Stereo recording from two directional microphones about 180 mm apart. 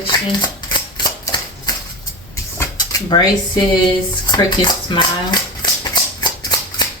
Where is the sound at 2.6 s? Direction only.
20° left (ahead or behind).